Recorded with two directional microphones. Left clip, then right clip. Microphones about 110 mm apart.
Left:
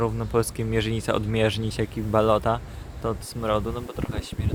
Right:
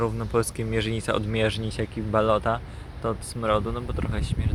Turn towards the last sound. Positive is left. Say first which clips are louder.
# even
turn(degrees=15)  # may be behind; listen again after turning